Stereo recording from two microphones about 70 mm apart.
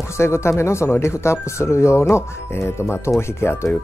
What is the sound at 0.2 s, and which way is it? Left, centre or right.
Speech, left.